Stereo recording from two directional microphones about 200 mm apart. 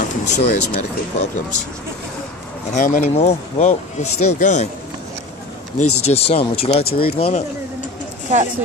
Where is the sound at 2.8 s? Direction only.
40° left (ahead or behind).